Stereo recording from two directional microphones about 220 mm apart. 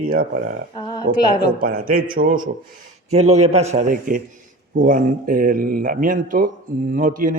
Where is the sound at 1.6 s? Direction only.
40° right (ahead or behind).